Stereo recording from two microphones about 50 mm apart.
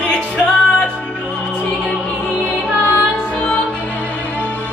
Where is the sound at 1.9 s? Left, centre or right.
Left.